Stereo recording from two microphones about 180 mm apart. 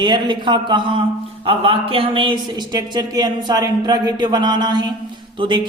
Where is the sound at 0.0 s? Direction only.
25° right (ahead or behind).